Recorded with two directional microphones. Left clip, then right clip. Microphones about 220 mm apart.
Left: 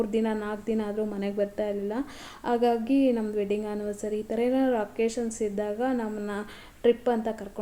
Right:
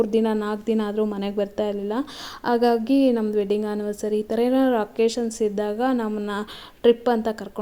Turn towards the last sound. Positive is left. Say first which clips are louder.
# right 5 dB
turn(degrees=-40)  # may be behind; listen again after turning